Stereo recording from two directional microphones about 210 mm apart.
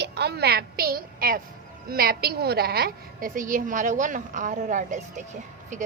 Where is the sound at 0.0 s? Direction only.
50° right (ahead or behind).